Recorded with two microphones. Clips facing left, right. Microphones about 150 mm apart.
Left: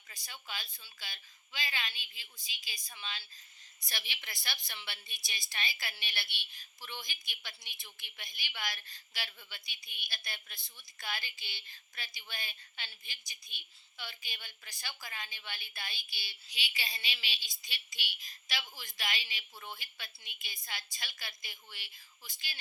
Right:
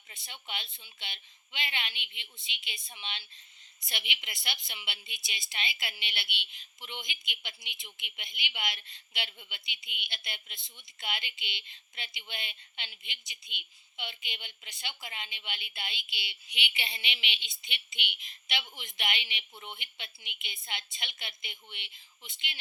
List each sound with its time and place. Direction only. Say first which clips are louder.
0.1 s a woman's voice: right 3 dB; 25° right (ahead or behind)